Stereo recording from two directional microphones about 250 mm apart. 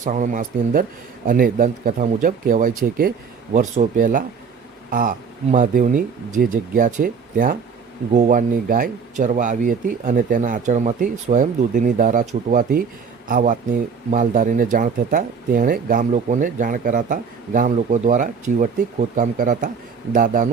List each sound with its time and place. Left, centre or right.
0.0 s speech: right